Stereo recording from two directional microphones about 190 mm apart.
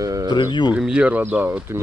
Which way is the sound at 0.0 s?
20° right (ahead or behind).